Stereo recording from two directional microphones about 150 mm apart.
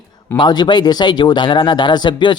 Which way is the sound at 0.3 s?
30° left (ahead or behind).